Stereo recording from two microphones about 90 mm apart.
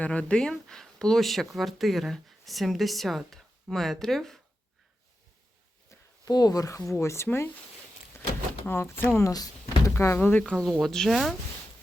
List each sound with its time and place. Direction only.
0.0 s speech: 15° left (ahead or behind)
5.9 s speech: 45° left (ahead or behind); by 7.3 s 30° left (ahead or behind)
7.3 s speech: 20° left (ahead or behind)
8.1 s door: 25° left (ahead or behind)
8.6 s speech: 20° left (ahead or behind)
9.3 s door: 45° left (ahead or behind)
9.9 s speech: 30° left (ahead or behind)
10.2 s speech: 15° left (ahead or behind)
10.7 s speech: centre (ahead or behind)